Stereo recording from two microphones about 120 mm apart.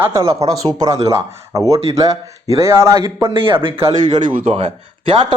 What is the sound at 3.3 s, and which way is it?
Speech, 45° right (ahead or behind).